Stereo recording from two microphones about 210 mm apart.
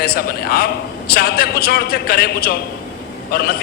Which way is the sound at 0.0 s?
45° left (ahead or behind).